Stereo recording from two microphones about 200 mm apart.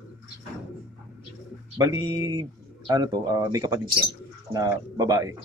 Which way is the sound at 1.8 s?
20° right (ahead or behind).